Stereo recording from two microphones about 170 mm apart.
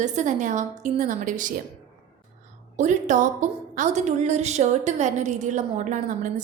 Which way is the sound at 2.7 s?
45° right (ahead or behind).